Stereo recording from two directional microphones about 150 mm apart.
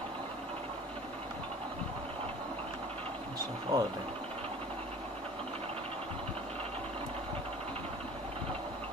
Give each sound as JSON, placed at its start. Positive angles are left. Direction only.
{"t": 3.7, "sound": "speech", "side_deg": -25}